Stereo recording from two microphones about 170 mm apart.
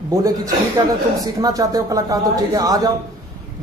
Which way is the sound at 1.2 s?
20° right (ahead or behind).